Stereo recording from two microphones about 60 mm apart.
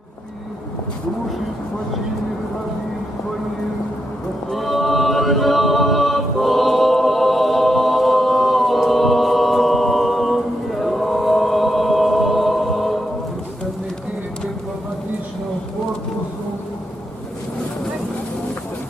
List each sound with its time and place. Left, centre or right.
4.5 s choir: centre